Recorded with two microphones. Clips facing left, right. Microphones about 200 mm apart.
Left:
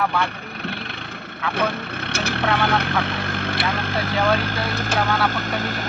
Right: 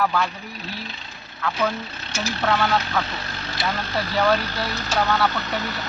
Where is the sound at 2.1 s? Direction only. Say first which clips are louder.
Even; 60° left (ahead or behind).